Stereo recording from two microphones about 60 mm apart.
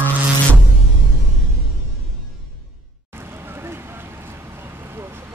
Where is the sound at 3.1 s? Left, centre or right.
Right.